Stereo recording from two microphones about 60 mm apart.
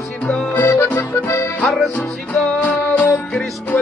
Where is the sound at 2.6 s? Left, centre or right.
Left.